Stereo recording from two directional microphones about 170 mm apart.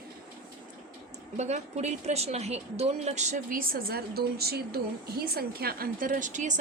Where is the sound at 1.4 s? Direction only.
40° right (ahead or behind).